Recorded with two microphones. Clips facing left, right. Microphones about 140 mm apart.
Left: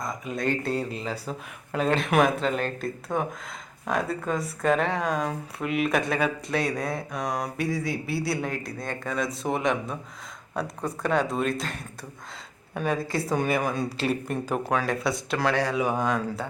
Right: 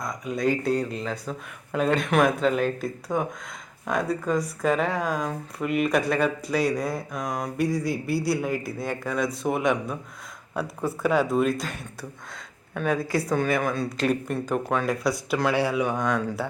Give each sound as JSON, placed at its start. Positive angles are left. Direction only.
{"t": 0.0, "sound": "speech", "side_deg": 0}
{"t": 13.3, "sound": "a woman's voice", "side_deg": 15}
{"t": 15.8, "sound": "speech", "side_deg": 5}